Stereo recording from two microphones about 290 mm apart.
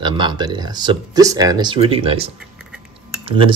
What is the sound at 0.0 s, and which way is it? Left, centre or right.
Speech, centre.